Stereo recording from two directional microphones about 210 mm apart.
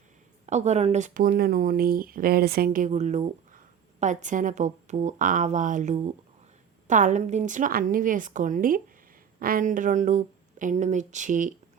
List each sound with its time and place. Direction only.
0.4 s speech: 35° right (ahead or behind)